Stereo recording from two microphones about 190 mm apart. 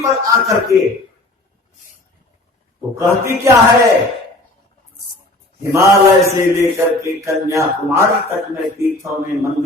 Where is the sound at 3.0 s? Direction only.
15° right (ahead or behind).